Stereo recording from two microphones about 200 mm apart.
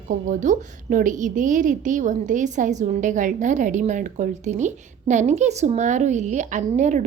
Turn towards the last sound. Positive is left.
turn(degrees=-35)  # may be behind; listen again after turning